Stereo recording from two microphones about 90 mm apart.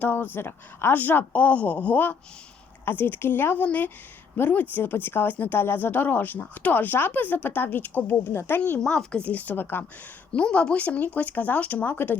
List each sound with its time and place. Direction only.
0.0 s speech: 20° left (ahead or behind)
8.8 s speech: 5° left (ahead or behind)
10.3 s speech: 10° left (ahead or behind)